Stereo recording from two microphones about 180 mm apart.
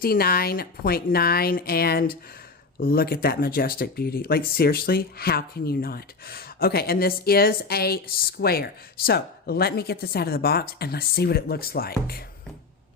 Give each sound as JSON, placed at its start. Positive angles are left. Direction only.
{"t": 0.0, "sound": "speech", "side_deg": 55}